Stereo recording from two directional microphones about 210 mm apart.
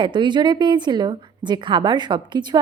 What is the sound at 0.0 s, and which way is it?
A woman's voice, 20° right (ahead or behind).